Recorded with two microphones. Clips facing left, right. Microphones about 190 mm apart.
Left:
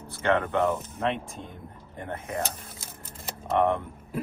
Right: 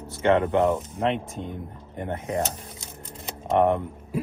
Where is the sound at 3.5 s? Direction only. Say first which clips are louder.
Right 3 dB; 20° right (ahead or behind).